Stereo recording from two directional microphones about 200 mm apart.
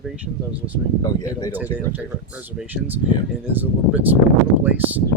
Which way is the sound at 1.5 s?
10° right (ahead or behind).